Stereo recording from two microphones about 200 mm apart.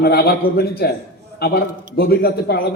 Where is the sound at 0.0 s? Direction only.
50° left (ahead or behind).